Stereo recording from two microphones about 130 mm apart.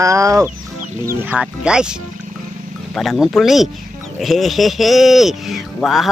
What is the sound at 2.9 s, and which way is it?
Speech, centre (ahead or behind).